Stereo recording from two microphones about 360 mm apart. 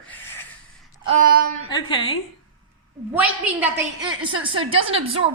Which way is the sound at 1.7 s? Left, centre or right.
Centre.